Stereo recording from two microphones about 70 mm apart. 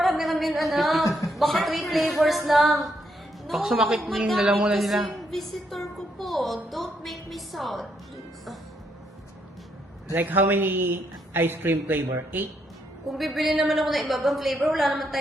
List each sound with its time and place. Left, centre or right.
0.0 s a sound: centre
1.3 s a woman's voice: centre
10.1 s a man's voice: right
13.1 s speech: centre